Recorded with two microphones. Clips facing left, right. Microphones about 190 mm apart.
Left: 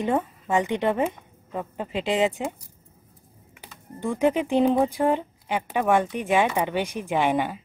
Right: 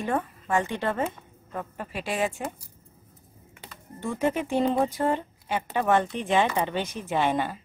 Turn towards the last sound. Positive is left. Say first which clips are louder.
# left 2 dB
turn(degrees=15)  # may be behind; listen again after turning